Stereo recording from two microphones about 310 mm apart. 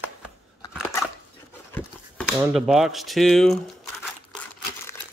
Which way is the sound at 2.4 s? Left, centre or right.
Centre.